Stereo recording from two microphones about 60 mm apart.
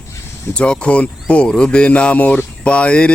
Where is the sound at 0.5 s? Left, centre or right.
Centre.